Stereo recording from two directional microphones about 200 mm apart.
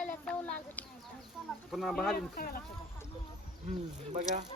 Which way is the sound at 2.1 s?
45° left (ahead or behind).